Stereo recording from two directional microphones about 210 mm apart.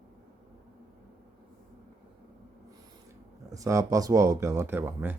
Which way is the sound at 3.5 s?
15° right (ahead or behind).